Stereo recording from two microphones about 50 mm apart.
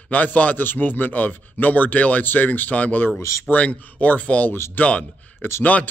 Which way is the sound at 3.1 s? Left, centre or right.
Left.